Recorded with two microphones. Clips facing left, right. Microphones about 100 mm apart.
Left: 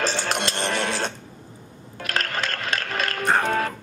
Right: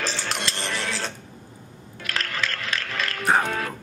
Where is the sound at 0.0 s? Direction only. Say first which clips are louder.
Left 4 dB; 50° left (ahead or behind).